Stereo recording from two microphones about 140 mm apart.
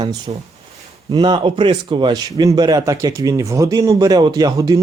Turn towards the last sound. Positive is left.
turn(degrees=-25)  # may be behind; listen again after turning